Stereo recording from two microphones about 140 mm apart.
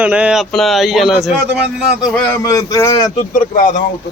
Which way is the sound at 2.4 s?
25° left (ahead or behind).